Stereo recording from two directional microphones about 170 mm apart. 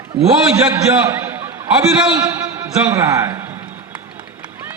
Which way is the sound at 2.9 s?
20° right (ahead or behind).